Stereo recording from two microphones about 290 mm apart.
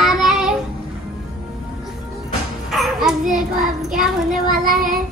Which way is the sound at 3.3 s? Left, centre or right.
Centre.